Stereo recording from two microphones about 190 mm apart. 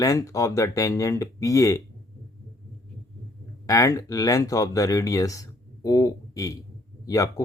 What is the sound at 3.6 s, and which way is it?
Speech, 15° left (ahead or behind).